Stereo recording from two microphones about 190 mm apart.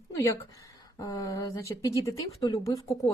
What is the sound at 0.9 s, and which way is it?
A woman's voice, 20° left (ahead or behind).